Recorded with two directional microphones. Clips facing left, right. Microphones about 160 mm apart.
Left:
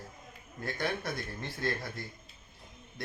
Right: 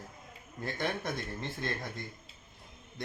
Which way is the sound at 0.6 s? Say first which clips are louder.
Even; 20° right (ahead or behind).